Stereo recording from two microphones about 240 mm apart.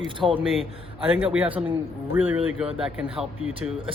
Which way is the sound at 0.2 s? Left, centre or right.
Centre.